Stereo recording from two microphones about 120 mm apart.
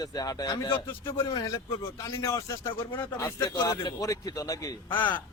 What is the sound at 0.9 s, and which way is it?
Speech, 25° left (ahead or behind).